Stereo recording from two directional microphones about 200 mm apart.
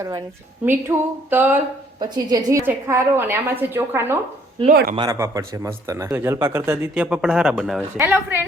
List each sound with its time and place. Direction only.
0.6 s speech: 10° right (ahead or behind)
4.7 s speech: 50° right (ahead or behind)
4.9 s speech: 15° right (ahead or behind)